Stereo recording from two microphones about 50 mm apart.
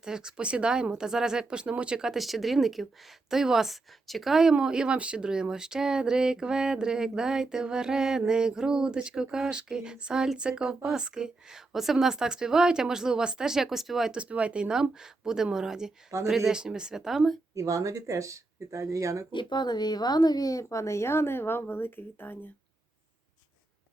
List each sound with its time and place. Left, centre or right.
0.0 s speech: centre
4.5 s speech: centre
14.1 s speech: right; by 16.5 s centre
16.5 s speech: centre
17.5 s speech: right
20.6 s a woman's voice: left